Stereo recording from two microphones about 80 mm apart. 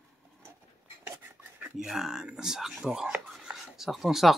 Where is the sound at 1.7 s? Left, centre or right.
Centre.